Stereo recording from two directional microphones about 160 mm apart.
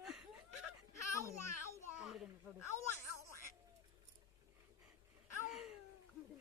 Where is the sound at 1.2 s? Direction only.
20° left (ahead or behind).